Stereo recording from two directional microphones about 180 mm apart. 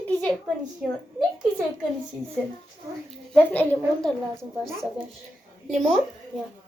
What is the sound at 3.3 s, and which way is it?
A woman's voice, 10° left (ahead or behind).